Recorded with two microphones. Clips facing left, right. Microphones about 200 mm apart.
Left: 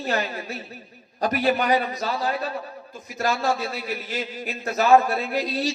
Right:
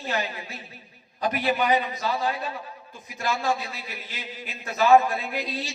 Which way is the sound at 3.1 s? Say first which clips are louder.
Left 3 dB; 45° left (ahead or behind).